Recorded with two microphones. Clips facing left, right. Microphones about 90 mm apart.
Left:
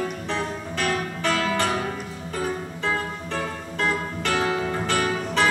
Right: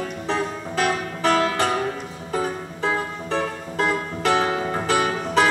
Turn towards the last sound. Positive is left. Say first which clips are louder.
# right 3 dB
turn(degrees=-5)  # may be behind; listen again after turning